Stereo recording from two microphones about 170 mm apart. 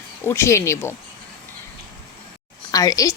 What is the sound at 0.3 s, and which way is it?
Speech, 15° left (ahead or behind).